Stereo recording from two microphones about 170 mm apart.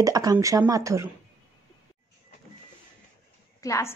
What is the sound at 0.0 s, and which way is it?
Speech, 20° right (ahead or behind).